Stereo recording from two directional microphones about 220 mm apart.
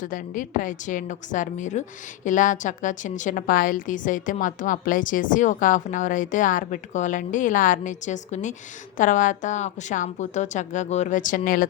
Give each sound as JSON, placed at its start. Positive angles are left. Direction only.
{"t": 0.0, "sound": "a woman's voice", "side_deg": 35}